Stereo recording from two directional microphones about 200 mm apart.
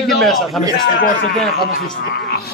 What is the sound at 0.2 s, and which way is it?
Speech, centre (ahead or behind).